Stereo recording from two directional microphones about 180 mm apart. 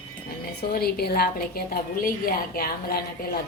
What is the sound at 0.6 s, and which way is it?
A woman's voice, 60° left (ahead or behind).